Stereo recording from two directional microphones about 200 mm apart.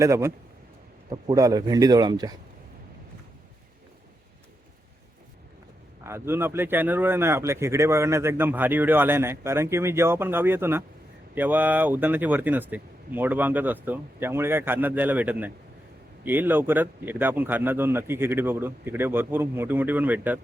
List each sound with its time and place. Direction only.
0.0 s a man's voice: 15° right (ahead or behind)
6.0 s a man's voice: 15° right (ahead or behind)